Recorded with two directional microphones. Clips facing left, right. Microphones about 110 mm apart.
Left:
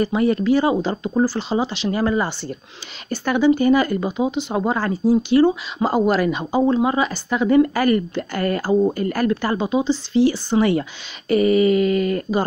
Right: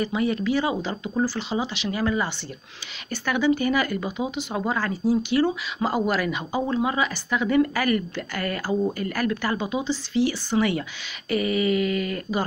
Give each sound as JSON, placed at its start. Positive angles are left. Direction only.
{"t": 0.0, "sound": "speech", "side_deg": 40}